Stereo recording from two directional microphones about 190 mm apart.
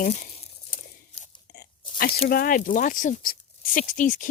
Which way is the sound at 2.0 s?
50° left (ahead or behind).